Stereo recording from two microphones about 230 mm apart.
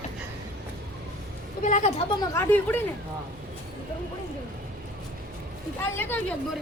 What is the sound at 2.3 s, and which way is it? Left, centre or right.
Speech, centre.